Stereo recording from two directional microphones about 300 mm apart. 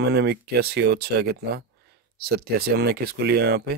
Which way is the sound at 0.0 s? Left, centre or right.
Right.